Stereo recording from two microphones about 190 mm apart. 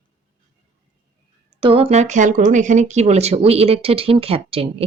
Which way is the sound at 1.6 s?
30° right (ahead or behind).